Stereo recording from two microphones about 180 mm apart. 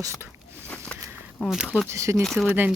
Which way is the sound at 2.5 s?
10° right (ahead or behind).